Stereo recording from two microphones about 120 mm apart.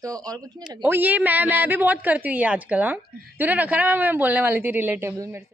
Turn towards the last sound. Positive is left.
turn(degrees=-20)  # may be behind; listen again after turning